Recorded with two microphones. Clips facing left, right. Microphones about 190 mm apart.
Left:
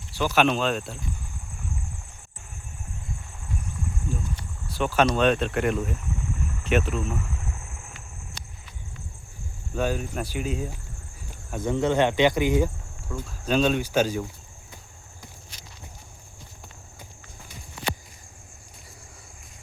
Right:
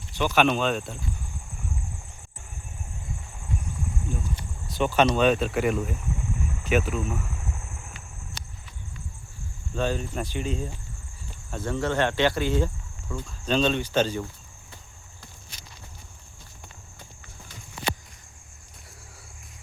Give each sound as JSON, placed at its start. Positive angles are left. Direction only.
{"t": 0.1, "sound": "speech", "side_deg": 5}
{"t": 4.8, "sound": "speech", "side_deg": 0}
{"t": 9.7, "sound": "speech", "side_deg": 10}